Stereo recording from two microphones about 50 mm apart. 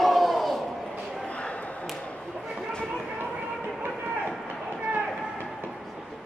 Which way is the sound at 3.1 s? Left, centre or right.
Right.